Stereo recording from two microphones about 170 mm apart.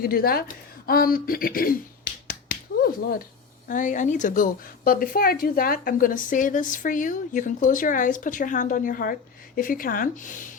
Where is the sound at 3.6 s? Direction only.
50° left (ahead or behind).